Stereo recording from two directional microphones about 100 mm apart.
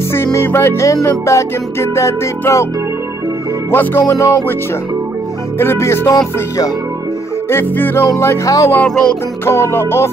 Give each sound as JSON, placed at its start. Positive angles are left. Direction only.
{"t": 0.1, "sound": "music", "side_deg": 25}
{"t": 3.7, "sound": "music", "side_deg": 25}
{"t": 5.6, "sound": "music", "side_deg": 25}
{"t": 7.4, "sound": "music", "side_deg": 20}
{"t": 8.7, "sound": "music", "side_deg": 10}
{"t": 9.4, "sound": "music", "side_deg": 25}